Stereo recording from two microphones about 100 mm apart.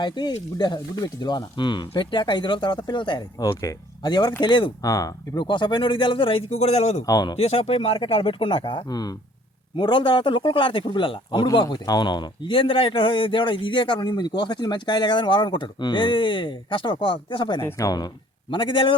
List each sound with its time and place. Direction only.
0.0 s speech: 45° left (ahead or behind)
4.8 s speech: 35° left (ahead or behind)
5.4 s a man's voice: 50° left (ahead or behind); by 7.0 s 90° left
7.0 s speech: 40° left (ahead or behind)
7.3 s speech: 90° left
7.9 s a man's voice: 60° left (ahead or behind)
11.5 s a man's voice: 45° left (ahead or behind)
17.6 s speech: 30° left (ahead or behind)
18.5 s a man's voice: 55° left (ahead or behind)